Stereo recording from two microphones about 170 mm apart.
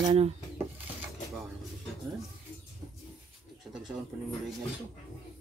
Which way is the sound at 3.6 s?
Centre (ahead or behind).